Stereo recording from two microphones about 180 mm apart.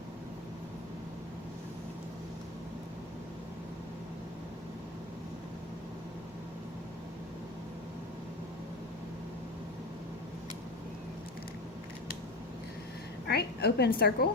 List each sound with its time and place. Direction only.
13.2 s a woman's voice: 65° left (ahead or behind)